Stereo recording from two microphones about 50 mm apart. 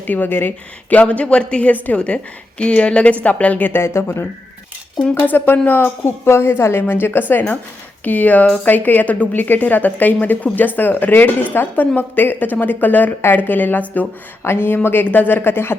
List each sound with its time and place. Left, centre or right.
0.0 s speech: left
0.9 s a woman's voice: left
3.7 s speech: left
5.1 s speech: left
14.4 s speech: left